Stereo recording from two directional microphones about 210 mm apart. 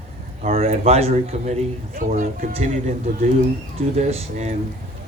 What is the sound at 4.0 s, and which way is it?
Speech, 30° right (ahead or behind).